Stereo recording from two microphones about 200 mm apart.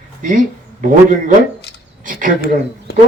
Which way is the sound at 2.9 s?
50° left (ahead or behind).